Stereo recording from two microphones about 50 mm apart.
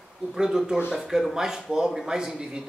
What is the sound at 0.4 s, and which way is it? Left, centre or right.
Speech, centre.